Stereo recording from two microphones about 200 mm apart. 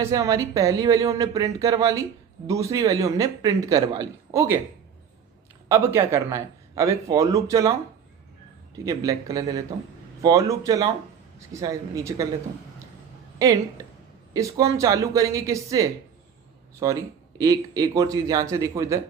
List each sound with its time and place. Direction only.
0.0 s speech: 15° right (ahead or behind)
5.6 s speech: 15° right (ahead or behind)
8.8 s speech: 15° right (ahead or behind)
13.4 s speech: 15° right (ahead or behind)